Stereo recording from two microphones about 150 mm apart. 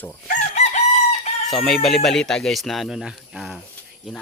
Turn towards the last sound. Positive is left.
turn(degrees=-5)  # may be behind; listen again after turning